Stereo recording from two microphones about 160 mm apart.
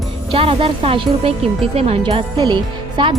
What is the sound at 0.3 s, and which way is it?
Speech, 35° right (ahead or behind).